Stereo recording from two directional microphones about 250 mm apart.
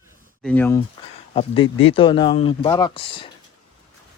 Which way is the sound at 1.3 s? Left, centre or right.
Left.